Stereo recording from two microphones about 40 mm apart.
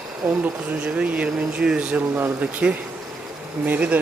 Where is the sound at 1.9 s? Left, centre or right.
Right.